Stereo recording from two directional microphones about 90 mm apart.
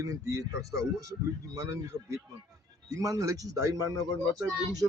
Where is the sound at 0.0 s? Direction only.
35° right (ahead or behind).